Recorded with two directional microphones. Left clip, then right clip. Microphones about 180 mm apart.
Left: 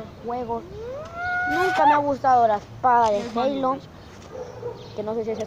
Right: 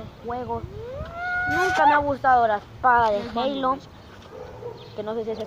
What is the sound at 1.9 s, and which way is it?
Speech, 20° left (ahead or behind).